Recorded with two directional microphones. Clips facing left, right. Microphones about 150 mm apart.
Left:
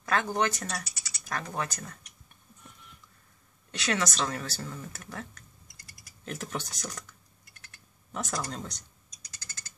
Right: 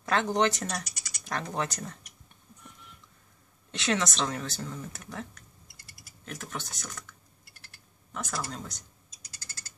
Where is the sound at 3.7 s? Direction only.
20° right (ahead or behind).